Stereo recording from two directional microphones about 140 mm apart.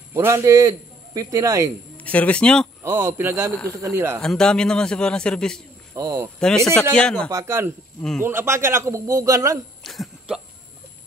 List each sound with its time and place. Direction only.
0.1 s a man's voice: 20° right (ahead or behind)
2.0 s speech: 10° left (ahead or behind)
2.8 s a man's voice: 15° right (ahead or behind)
4.2 s a man's voice: 5° left (ahead or behind)
5.9 s a man's voice: 20° right (ahead or behind)
6.4 s a man's voice: 5° left (ahead or behind)
7.2 s a man's voice: 20° right (ahead or behind)
9.8 s a sound: centre (ahead or behind)